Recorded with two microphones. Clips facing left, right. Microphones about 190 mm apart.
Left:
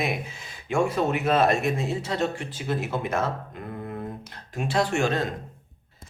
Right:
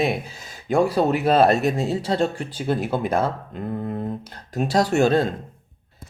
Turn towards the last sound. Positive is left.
turn(degrees=-30)  # may be behind; listen again after turning